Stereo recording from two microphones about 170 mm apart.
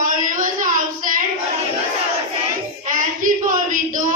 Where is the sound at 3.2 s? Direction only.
50° right (ahead or behind).